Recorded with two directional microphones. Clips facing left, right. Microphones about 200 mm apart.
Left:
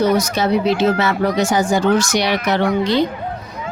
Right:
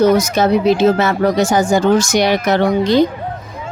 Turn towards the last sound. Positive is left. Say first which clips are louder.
# right 4 dB
turn(degrees=-45)  # may be behind; listen again after turning